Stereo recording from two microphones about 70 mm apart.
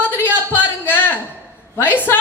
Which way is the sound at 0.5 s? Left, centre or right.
Left.